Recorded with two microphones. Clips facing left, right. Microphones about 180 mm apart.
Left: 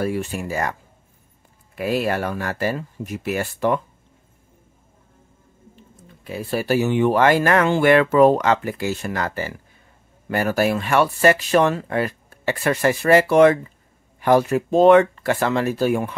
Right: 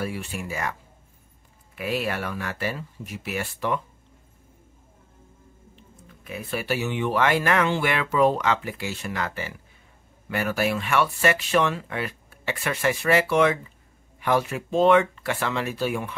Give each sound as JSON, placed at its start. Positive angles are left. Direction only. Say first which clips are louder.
{"t": 0.0, "sound": "speech", "louder": "left 7 dB", "side_deg": 45}
{"t": 1.8, "sound": "speech", "louder": "left 6 dB", "side_deg": 40}
{"t": 6.0, "sound": "speech", "louder": "left 6 dB", "side_deg": 30}